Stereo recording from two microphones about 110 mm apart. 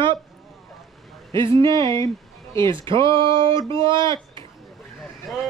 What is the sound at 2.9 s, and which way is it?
Speech, 50° right (ahead or behind).